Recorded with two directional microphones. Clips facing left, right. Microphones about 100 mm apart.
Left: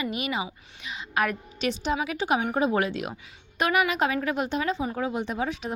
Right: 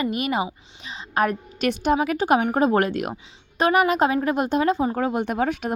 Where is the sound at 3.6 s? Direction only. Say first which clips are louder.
Right 5 dB; 35° right (ahead or behind).